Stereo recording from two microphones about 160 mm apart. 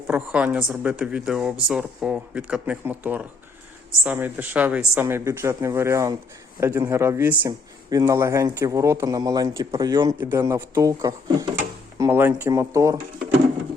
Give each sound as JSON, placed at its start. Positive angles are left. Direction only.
{"t": 0.1, "sound": "a man's voice", "side_deg": -10}
{"t": 10.2, "sound": "a man's voice", "side_deg": -15}